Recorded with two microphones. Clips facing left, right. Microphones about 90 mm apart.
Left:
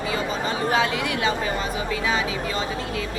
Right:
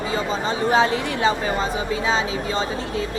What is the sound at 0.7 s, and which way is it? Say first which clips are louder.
Speech: right 5 dB; 30° right (ahead or behind).